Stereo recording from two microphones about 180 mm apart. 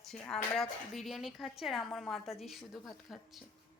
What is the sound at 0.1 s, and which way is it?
Speech, centre (ahead or behind).